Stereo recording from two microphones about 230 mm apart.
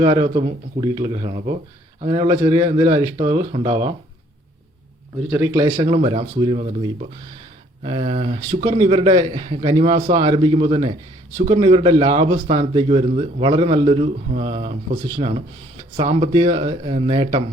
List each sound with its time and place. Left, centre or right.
0.0 s a man's voice: centre
5.3 s a man's voice: centre